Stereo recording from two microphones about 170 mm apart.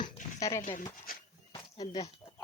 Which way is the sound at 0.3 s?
20° left (ahead or behind).